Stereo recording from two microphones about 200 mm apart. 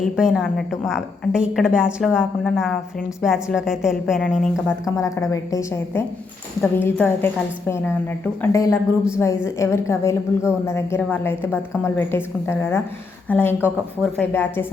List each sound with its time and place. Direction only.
0.2 s a woman's voice: 5° right (ahead or behind)
4.9 s a woman's voice: 15° left (ahead or behind)